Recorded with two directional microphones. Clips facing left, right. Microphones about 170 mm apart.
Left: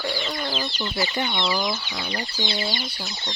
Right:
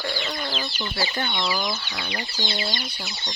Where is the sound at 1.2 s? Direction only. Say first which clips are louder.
Left 2 dB; centre (ahead or behind).